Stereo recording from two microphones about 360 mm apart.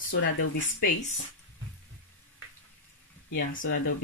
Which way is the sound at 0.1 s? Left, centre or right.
Left.